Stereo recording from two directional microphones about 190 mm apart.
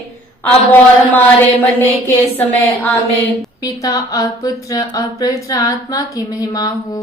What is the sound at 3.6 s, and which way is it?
Speech, 20° left (ahead or behind).